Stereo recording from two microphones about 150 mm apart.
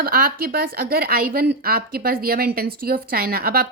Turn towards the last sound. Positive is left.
turn(degrees=-90)